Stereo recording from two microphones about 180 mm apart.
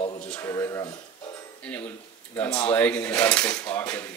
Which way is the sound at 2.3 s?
10° left (ahead or behind).